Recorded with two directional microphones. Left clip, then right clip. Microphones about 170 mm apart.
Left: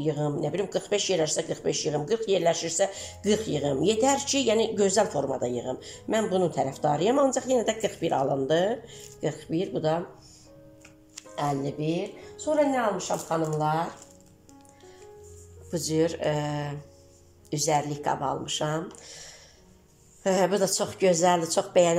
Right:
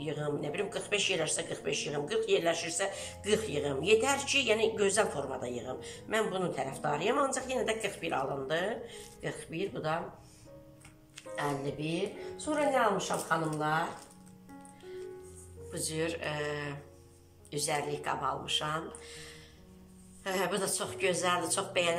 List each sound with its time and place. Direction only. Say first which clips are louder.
0.0 s speech: left 7 dB; 35° left (ahead or behind)
11.1 s speech: left 6 dB; 35° left (ahead or behind)
15.7 s speech: left 9 dB; 40° left (ahead or behind)